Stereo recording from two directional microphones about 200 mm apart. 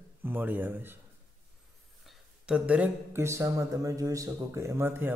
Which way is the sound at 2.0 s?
5° right (ahead or behind).